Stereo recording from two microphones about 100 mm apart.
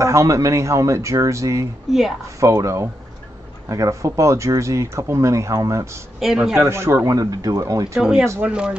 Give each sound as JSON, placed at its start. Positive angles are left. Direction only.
{"t": 0.0, "sound": "speech", "side_deg": -30}
{"t": 1.9, "sound": "a man's voice", "side_deg": -5}
{"t": 2.4, "sound": "speech", "side_deg": -30}
{"t": 6.1, "sound": "a man's voice", "side_deg": -5}
{"t": 6.6, "sound": "speech", "side_deg": -25}
{"t": 7.2, "sound": "speech", "side_deg": -35}
{"t": 8.0, "sound": "speech", "side_deg": -5}